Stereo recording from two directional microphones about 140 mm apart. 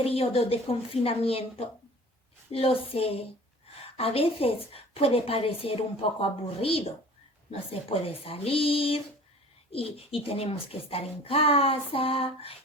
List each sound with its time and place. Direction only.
0.0 s a woman's voice: 45° left (ahead or behind)